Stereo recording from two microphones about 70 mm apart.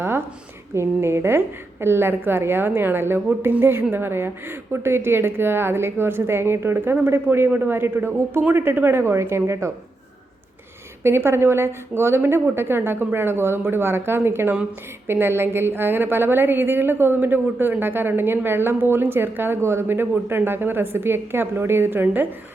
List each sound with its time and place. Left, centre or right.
0.7 s a woman's voice: right
11.0 s a woman's voice: right